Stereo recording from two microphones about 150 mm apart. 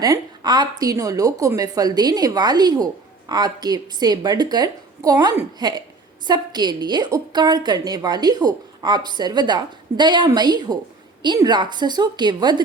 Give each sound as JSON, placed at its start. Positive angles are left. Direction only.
{"t": 0.0, "sound": "a woman's voice", "side_deg": -25}